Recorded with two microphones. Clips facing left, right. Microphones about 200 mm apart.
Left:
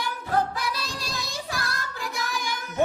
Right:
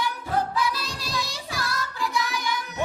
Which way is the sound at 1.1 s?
50° left (ahead or behind).